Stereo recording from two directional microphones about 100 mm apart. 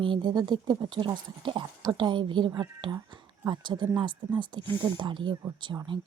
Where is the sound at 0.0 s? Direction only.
50° right (ahead or behind).